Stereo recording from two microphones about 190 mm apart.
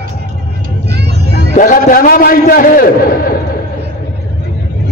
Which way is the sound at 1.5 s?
45° left (ahead or behind).